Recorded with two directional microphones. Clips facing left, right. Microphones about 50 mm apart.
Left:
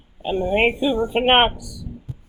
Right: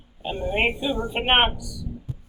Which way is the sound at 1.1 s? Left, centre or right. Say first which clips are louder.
Left 7 dB; left.